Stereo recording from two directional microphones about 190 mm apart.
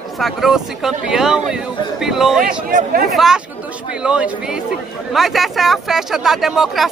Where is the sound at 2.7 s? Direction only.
45° right (ahead or behind).